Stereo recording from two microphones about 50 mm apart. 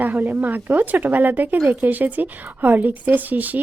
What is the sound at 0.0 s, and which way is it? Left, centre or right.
Speech, right.